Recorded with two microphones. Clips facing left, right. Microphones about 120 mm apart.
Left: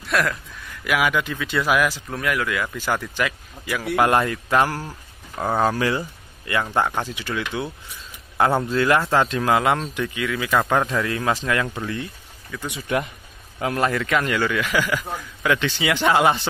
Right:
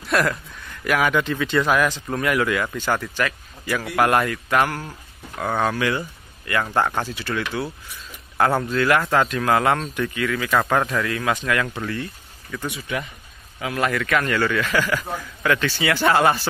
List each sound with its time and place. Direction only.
0.0 s speech: centre (ahead or behind)
2.8 s a man's voice: 10° left (ahead or behind)
6.6 s a man's voice: 10° left (ahead or behind)
10.9 s speech: 25° left (ahead or behind)
12.8 s a man's voice: 50° left (ahead or behind)
13.7 s a man's voice: 25° left (ahead or behind)